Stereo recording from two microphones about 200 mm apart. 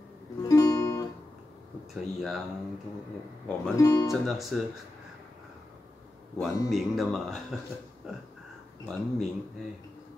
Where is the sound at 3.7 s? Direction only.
15° left (ahead or behind).